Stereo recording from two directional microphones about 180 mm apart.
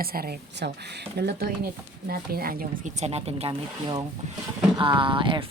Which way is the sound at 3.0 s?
35° right (ahead or behind).